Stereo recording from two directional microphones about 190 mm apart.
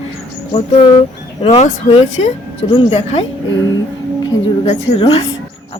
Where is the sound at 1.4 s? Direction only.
35° left (ahead or behind).